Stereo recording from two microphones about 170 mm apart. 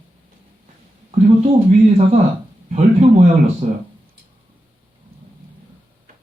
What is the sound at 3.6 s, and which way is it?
Speech, 45° right (ahead or behind).